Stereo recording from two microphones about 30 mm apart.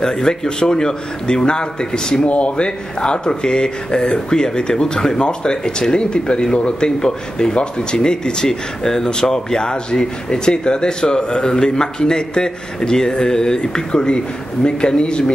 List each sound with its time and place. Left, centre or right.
0.0 s speech: centre
2.2 s speech: left